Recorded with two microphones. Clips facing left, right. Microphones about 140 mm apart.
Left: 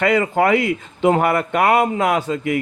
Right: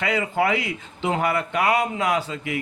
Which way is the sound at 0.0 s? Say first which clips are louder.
Left 6 dB; 50° left (ahead or behind).